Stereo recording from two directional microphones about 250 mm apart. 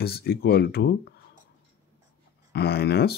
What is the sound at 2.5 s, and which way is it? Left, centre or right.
Speech, left.